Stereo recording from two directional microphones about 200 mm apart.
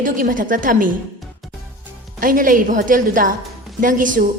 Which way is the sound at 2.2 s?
45° right (ahead or behind).